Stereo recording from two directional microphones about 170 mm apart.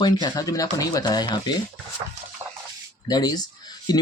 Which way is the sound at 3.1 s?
20° left (ahead or behind).